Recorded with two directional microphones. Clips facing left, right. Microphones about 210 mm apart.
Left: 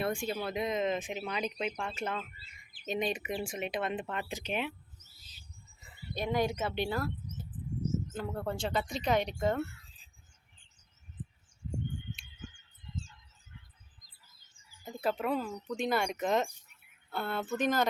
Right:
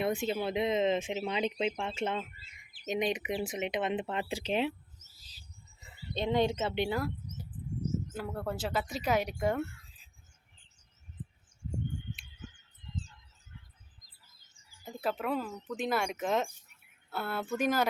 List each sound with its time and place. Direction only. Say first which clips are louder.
0.0 s speech: right 2 dB; 20° right (ahead or behind)
6.1 s speech: right 2 dB; 25° right (ahead or behind)
14.9 s speech: left 1 dB; centre (ahead or behind)